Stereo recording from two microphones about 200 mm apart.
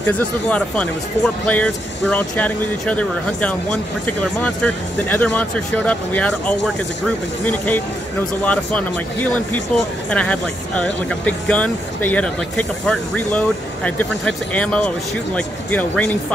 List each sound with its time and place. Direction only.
0.0 s speech: 5° left (ahead or behind)